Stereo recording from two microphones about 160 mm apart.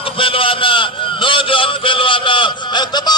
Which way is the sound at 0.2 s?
35° left (ahead or behind).